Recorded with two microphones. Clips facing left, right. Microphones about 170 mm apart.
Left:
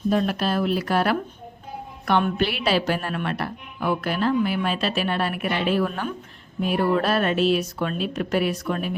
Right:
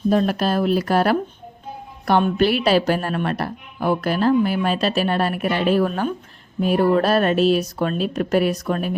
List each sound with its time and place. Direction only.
0.1 s a woman's voice: 40° right (ahead or behind)